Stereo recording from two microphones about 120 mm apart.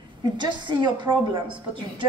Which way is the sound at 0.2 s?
40° right (ahead or behind).